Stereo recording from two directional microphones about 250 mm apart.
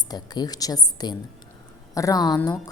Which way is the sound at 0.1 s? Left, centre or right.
Centre.